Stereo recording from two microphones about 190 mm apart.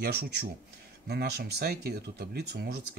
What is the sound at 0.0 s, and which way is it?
Speech, 55° right (ahead or behind).